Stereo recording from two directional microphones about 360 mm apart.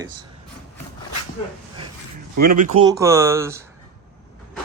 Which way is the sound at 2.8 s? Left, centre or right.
Centre.